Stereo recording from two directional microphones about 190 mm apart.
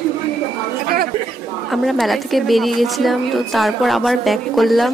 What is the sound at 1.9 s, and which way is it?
A woman's voice, centre (ahead or behind).